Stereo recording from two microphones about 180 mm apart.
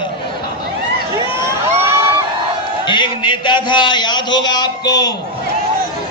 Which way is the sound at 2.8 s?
25° left (ahead or behind).